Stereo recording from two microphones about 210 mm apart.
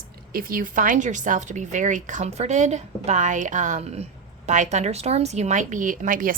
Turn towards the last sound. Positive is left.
turn(degrees=-40)  # may be behind; listen again after turning